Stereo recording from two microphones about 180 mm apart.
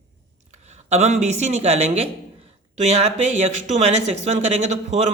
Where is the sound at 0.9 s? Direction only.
40° right (ahead or behind).